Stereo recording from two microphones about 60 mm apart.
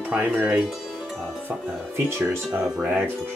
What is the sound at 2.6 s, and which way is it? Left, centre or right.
Speech, centre.